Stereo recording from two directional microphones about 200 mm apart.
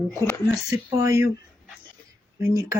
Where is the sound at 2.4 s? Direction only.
15° right (ahead or behind).